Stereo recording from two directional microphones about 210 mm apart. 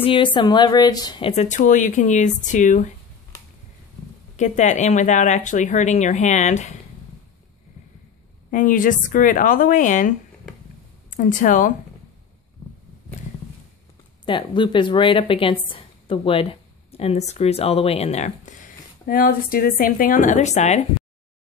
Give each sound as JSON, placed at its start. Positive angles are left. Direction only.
{"t": 0.0, "sound": "speech", "side_deg": 25}
{"t": 4.4, "sound": "speech", "side_deg": 35}
{"t": 8.5, "sound": "speech", "side_deg": 40}
{"t": 14.2, "sound": "a woman's voice", "side_deg": 25}